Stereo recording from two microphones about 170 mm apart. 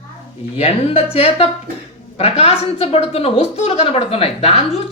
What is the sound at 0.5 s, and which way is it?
A woman's voice, 35° left (ahead or behind).